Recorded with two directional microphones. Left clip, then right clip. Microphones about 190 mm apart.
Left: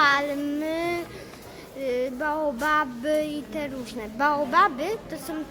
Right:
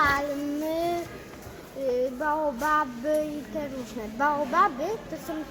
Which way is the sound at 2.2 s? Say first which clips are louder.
Left 1 dB; 25° left (ahead or behind).